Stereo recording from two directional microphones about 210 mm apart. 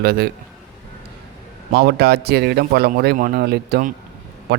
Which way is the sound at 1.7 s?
50° right (ahead or behind).